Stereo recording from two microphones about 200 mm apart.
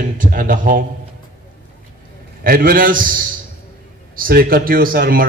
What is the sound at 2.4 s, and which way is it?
A man's voice, 45° right (ahead or behind).